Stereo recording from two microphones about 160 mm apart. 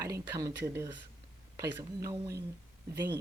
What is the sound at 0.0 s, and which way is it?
A woman's voice, 20° right (ahead or behind).